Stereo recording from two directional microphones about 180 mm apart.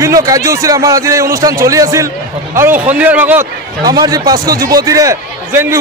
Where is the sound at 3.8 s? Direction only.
20° right (ahead or behind).